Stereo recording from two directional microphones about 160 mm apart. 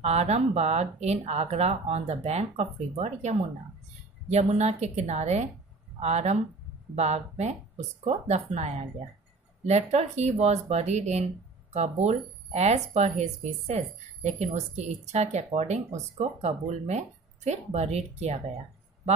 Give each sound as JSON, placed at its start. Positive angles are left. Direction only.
{"t": 0.0, "sound": "a woman's voice", "side_deg": -40}